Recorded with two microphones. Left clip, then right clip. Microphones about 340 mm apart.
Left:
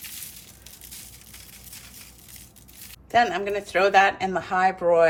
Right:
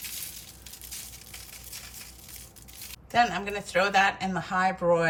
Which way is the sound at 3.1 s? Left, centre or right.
Centre.